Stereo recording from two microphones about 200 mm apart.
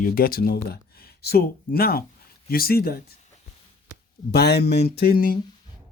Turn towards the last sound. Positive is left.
turn(degrees=45)  # may be behind; listen again after turning